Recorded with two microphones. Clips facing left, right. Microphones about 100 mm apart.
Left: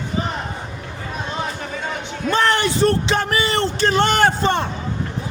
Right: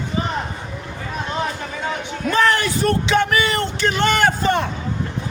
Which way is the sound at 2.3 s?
30° left (ahead or behind).